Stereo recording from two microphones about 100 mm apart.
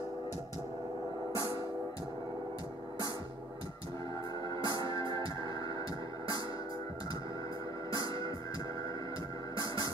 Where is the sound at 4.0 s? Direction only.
35° left (ahead or behind).